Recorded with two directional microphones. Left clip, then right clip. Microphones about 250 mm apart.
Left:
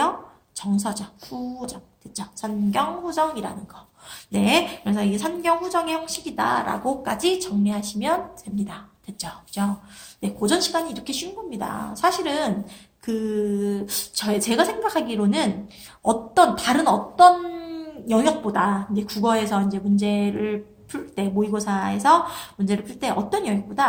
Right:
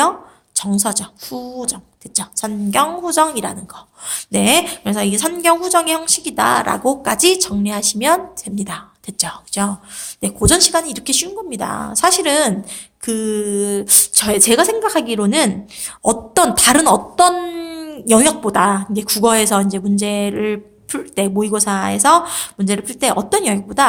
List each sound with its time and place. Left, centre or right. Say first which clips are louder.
0.5 s a woman's voice: right 7 dB; right